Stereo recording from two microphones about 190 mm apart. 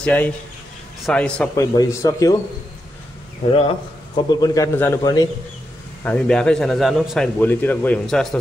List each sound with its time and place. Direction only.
0.0 s a man's voice: 10° left (ahead or behind)
1.5 s speech: 15° left (ahead or behind)
3.5 s a man's voice: 25° left (ahead or behind)
6.0 s a man's voice: 5° left (ahead or behind)
7.3 s speech: 10° left (ahead or behind)